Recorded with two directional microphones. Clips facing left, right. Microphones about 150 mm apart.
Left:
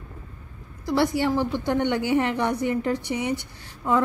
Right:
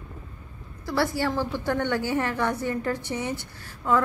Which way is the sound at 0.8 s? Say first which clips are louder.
Left 3 dB; 20° left (ahead or behind).